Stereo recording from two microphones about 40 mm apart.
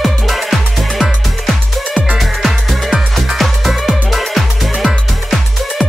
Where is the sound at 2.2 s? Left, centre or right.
Centre.